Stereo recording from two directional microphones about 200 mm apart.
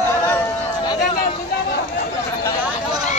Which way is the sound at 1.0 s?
45° left (ahead or behind).